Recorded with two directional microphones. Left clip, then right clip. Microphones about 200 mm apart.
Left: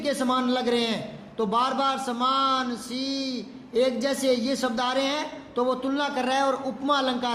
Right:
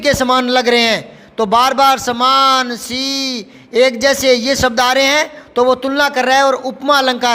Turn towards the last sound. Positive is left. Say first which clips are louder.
# right 12 dB
turn(degrees=-40)  # may be behind; listen again after turning